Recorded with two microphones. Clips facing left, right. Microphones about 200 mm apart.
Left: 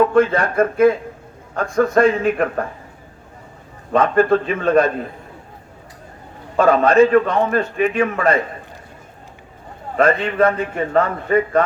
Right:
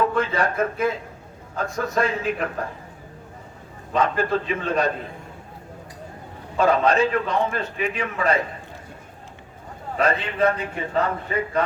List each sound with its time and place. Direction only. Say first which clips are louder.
0.1 s a man's voice: left 7 dB; 50° left (ahead or behind)
3.9 s a man's voice: left 7 dB; 55° left (ahead or behind)
6.6 s a man's voice: left 6 dB; 55° left (ahead or behind)
10.0 s a man's voice: left 6 dB; 55° left (ahead or behind)